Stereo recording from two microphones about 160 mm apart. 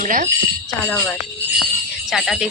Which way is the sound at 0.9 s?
10° left (ahead or behind).